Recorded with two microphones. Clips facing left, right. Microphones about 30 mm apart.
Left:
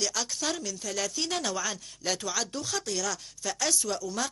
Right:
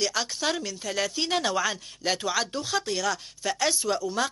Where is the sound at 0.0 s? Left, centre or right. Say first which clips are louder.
Right 4 dB; right.